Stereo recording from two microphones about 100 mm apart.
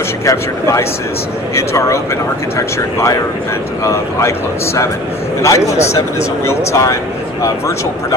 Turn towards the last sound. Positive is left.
turn(degrees=30)  # may be behind; listen again after turning